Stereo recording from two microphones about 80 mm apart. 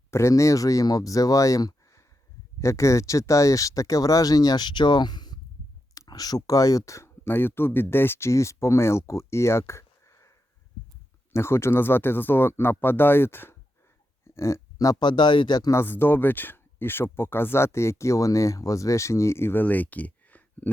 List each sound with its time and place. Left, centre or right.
0.1 s speech: left
5.9 s speech: left
7.3 s speech: left
14.3 s a sound: left
14.9 s speech: left
15.7 s speech: left